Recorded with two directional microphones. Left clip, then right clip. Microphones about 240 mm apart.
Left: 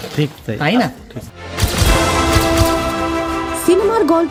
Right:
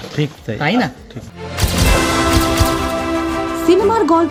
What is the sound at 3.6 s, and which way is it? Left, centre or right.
Speech, left.